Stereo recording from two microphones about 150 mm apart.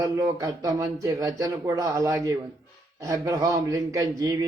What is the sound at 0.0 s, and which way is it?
Speech, 25° right (ahead or behind).